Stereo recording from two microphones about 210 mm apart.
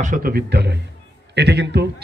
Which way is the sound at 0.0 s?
40° right (ahead or behind).